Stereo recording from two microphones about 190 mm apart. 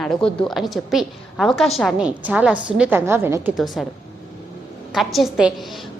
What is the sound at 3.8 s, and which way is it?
Speech, centre (ahead or behind).